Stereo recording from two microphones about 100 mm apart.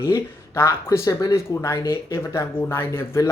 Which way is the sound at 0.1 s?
25° left (ahead or behind).